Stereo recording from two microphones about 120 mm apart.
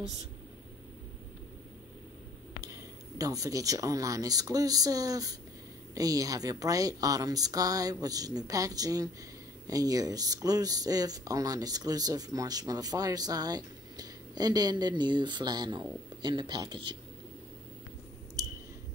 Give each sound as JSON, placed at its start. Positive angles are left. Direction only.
{"t": 2.7, "sound": "speech", "side_deg": -30}